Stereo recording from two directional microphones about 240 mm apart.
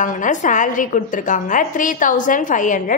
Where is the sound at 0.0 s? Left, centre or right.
Left.